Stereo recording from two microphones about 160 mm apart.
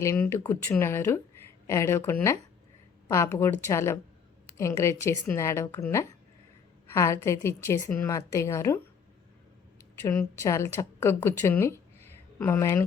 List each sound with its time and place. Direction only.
0.0 s a woman's voice: 15° left (ahead or behind)
10.0 s speech: 15° left (ahead or behind)